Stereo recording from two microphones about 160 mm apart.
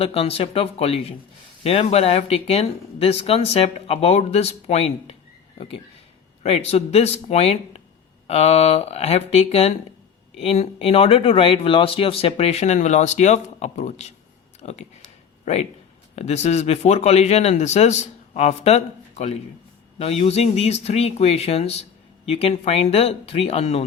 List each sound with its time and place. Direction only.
0.0 s speech: 35° left (ahead or behind)
6.4 s speech: 40° left (ahead or behind)
16.1 s speech: 45° left (ahead or behind)